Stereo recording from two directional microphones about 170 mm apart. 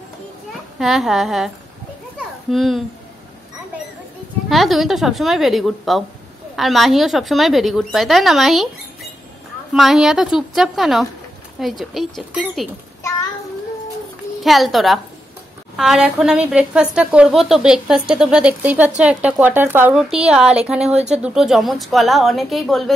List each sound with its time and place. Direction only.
0.7 s a woman's voice: centre (ahead or behind)
2.1 s children playing: centre (ahead or behind)
4.5 s a woman's voice: centre (ahead or behind)
9.7 s a woman's voice: centre (ahead or behind)
14.4 s a woman's voice: centre (ahead or behind)